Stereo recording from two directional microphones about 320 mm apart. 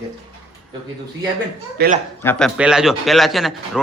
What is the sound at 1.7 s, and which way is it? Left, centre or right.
Speech, right.